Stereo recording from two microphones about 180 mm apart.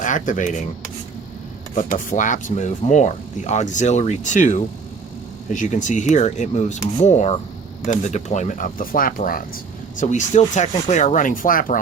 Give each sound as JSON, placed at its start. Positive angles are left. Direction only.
{"t": 0.0, "sound": "speech", "side_deg": 45}
{"t": 1.7, "sound": "speech", "side_deg": 45}